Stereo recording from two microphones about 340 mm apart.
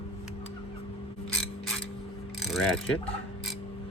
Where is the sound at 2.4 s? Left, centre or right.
Centre.